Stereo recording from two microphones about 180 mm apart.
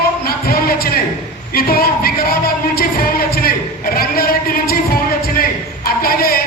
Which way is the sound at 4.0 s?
55° left (ahead or behind).